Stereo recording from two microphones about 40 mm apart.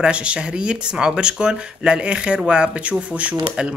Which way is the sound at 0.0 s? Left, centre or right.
Right.